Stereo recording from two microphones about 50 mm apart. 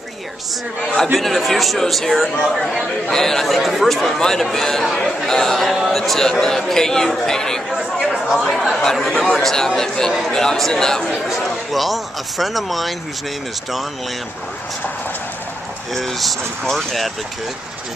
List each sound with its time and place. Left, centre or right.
1.1 s a man's voice: centre
7.7 s speech: centre
8.4 s a man's voice: centre
11.2 s speech: centre
15.9 s speech: centre